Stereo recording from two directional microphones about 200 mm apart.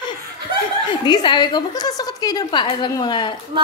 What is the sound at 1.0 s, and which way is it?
A woman's voice, 20° left (ahead or behind).